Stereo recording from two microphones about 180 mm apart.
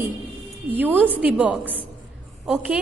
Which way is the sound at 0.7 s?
10° right (ahead or behind).